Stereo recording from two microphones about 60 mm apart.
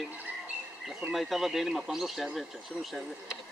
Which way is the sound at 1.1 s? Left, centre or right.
Centre.